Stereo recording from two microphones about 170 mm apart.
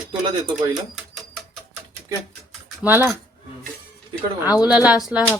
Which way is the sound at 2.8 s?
10° right (ahead or behind).